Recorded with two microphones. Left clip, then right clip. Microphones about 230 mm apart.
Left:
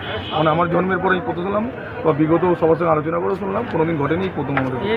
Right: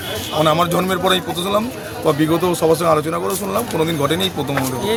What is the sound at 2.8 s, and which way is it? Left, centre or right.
A man's voice, right.